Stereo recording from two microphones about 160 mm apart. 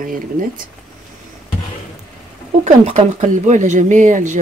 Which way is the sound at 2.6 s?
50° right (ahead or behind).